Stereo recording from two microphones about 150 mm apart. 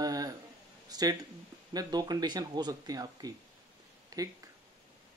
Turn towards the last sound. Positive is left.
turn(degrees=-25)  # may be behind; listen again after turning